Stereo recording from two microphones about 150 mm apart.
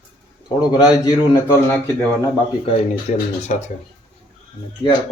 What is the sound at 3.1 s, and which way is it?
Speech, 55° left (ahead or behind).